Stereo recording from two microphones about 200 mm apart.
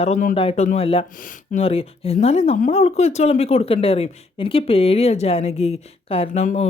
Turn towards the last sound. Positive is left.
turn(degrees=35)  # may be behind; listen again after turning